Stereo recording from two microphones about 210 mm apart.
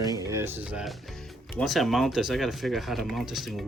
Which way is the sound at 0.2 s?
15° right (ahead or behind).